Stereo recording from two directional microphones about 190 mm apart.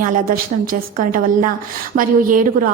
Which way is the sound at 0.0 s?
50° right (ahead or behind).